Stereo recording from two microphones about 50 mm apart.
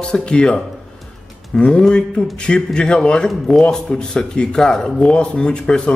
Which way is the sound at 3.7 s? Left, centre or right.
Centre.